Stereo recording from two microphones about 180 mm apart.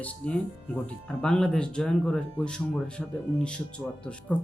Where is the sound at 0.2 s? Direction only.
5° left (ahead or behind).